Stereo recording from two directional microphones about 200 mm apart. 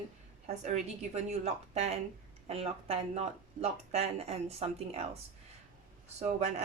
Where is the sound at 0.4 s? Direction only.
35° right (ahead or behind).